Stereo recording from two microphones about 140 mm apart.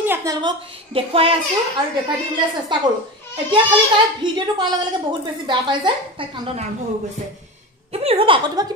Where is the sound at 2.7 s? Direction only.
35° right (ahead or behind).